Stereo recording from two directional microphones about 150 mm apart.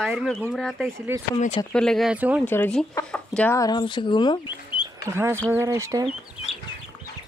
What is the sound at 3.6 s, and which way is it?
Speech, 30° left (ahead or behind).